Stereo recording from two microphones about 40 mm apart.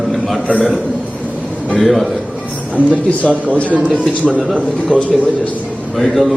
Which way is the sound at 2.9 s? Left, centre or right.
Left.